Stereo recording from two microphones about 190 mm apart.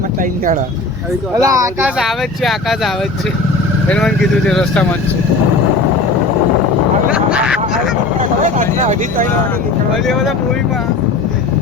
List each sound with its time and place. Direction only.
0.2 s speech: 45° right (ahead or behind)
1.4 s speech: 15° right (ahead or behind)
2.0 s speech: centre (ahead or behind)
7.1 s a sound: 5° right (ahead or behind)
8.2 s vehicle: 40° right (ahead or behind)